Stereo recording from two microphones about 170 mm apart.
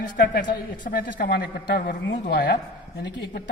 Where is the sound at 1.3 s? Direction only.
80° left.